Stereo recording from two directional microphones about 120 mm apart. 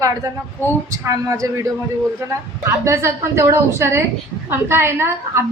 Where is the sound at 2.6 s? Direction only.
20° right (ahead or behind).